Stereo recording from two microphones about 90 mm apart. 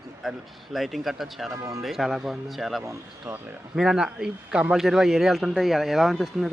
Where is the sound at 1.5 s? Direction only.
35° right (ahead or behind).